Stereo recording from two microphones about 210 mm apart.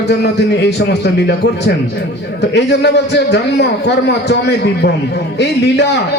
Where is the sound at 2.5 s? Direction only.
55° left (ahead or behind).